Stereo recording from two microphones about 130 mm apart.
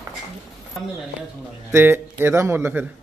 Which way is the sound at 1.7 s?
15° right (ahead or behind).